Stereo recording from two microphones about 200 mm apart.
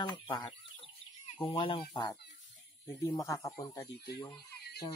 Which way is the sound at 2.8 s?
10° left (ahead or behind).